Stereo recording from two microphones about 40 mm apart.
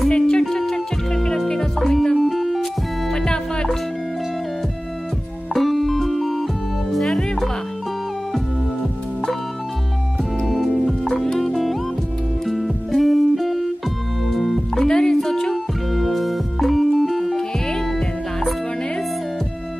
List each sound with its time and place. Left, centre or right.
0.1 s music: centre
1.8 s music: centre
3.1 s music: centre
5.5 s music: centre
10.4 s music: centre
14.8 s music: centre
15.5 s music: centre
17.4 s music: centre